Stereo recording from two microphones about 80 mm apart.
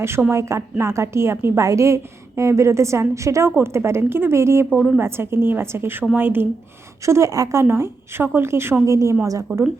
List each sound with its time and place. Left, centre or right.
0.3 s a woman's voice: right
4.7 s a woman's voice: centre
4.9 s a woman's voice: right
7.0 s a woman's voice: right